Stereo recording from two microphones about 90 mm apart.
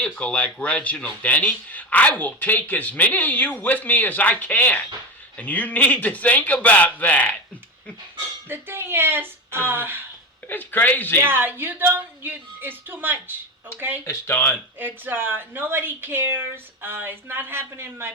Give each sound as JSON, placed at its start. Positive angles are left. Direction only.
{"t": 0.0, "sound": "speech", "side_deg": 15}
{"t": 8.4, "sound": "a woman's voice", "side_deg": -25}
{"t": 10.5, "sound": "speech", "side_deg": 20}
{"t": 11.2, "sound": "a woman's voice", "side_deg": -25}
{"t": 14.0, "sound": "speech", "side_deg": 25}
{"t": 14.8, "sound": "a woman's voice", "side_deg": -25}